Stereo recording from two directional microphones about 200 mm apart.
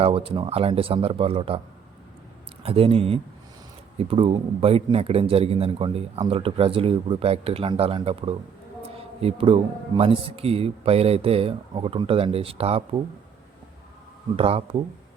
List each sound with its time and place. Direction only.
0.0 s a man's voice: 25° right (ahead or behind)
2.6 s a man's voice: 30° right (ahead or behind)
14.3 s a man's voice: 30° right (ahead or behind)